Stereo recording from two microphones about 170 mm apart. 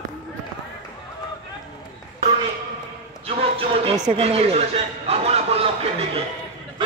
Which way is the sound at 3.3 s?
35° right (ahead or behind).